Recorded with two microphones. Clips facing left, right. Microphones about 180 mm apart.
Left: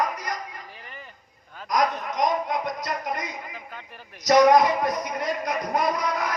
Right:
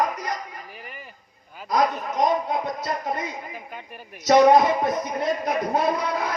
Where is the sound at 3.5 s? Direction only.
15° right (ahead or behind).